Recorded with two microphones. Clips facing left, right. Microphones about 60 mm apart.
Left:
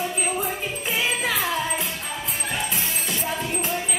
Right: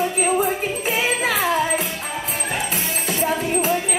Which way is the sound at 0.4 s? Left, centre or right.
Right.